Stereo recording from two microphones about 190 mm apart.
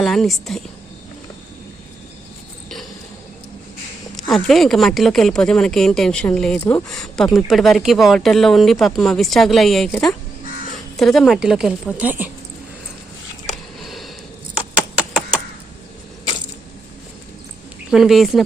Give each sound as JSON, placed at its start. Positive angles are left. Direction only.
{"t": 0.0, "sound": "speech", "side_deg": 0}
{"t": 4.3, "sound": "speech", "side_deg": 0}
{"t": 13.7, "sound": "a sound", "side_deg": 0}
{"t": 17.9, "sound": "speech", "side_deg": 0}